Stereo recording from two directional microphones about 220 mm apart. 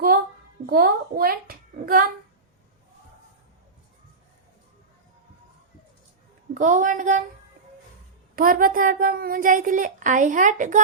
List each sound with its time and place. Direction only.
0.7 s a woman's voice: 45° right (ahead or behind)
6.5 s a woman's voice: 35° right (ahead or behind)
8.4 s a woman's voice: 40° right (ahead or behind)